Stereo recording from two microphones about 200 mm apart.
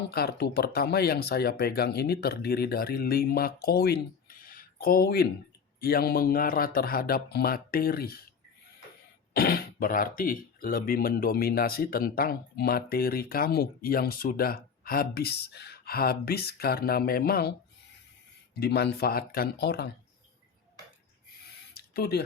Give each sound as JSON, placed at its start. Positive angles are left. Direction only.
{"t": 0.1, "sound": "speech", "side_deg": 55}
{"t": 9.3, "sound": "speech", "side_deg": 50}
{"t": 18.6, "sound": "speech", "side_deg": 55}
{"t": 21.7, "sound": "a sound", "side_deg": 50}